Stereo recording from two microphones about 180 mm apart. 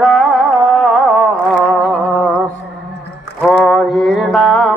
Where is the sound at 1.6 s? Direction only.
5° left (ahead or behind).